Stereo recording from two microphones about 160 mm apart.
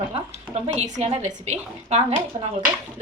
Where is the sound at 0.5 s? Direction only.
40° right (ahead or behind).